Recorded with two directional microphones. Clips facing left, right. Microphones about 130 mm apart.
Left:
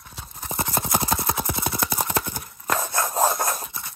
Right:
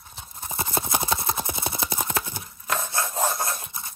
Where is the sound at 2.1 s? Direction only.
50° left (ahead or behind).